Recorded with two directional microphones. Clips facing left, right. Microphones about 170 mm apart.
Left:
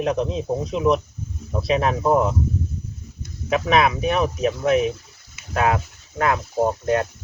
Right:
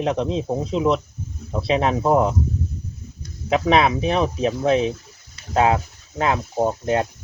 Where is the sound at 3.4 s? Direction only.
30° right (ahead or behind).